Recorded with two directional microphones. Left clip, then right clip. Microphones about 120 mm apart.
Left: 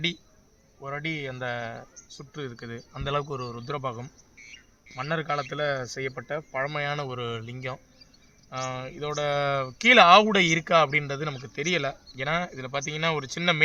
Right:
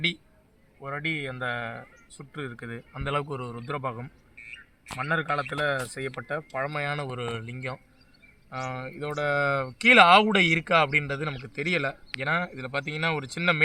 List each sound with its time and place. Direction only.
0.8 s speech: 20° left (ahead or behind)
4.4 s a sound: 75° left (ahead or behind)
4.9 s speech: 10° left (ahead or behind)